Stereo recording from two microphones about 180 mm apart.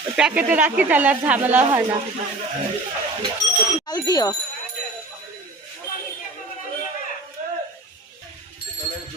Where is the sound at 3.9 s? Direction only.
20° left (ahead or behind).